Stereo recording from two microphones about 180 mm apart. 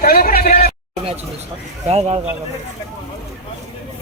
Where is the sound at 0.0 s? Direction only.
55° left (ahead or behind).